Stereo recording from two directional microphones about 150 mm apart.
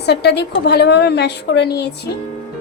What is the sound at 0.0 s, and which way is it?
A woman's voice, 90° left.